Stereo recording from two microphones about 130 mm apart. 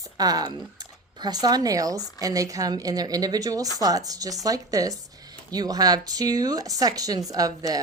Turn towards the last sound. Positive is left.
turn(degrees=-30)  # may be behind; listen again after turning